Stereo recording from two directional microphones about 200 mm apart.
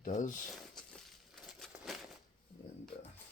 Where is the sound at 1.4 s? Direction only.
Centre (ahead or behind).